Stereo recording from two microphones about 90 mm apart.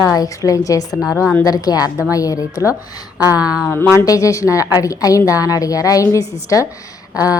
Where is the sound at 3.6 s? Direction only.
25° left (ahead or behind).